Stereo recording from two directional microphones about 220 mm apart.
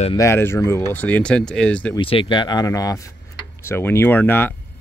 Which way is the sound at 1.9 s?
25° left (ahead or behind).